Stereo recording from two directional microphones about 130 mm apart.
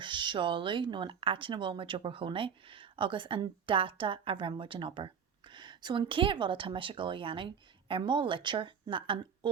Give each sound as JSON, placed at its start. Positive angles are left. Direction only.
{"t": 0.0, "sound": "speech", "side_deg": -35}